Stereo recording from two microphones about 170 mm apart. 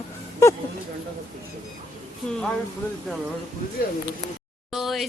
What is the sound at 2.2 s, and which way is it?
Speech, 5° left (ahead or behind).